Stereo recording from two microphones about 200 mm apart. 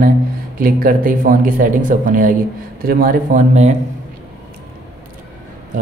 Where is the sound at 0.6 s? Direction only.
45° right (ahead or behind).